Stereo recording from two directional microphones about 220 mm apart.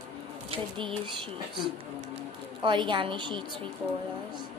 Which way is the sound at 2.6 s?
20° right (ahead or behind).